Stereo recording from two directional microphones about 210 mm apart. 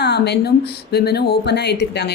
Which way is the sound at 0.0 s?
50° left (ahead or behind).